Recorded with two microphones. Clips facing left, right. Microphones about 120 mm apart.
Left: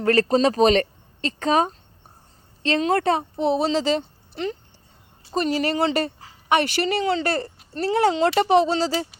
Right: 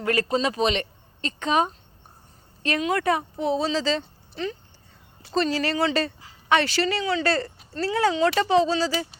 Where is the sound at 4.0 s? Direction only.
25° left (ahead or behind).